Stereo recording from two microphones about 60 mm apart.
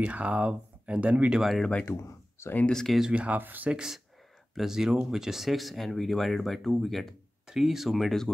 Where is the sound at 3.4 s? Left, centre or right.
Right.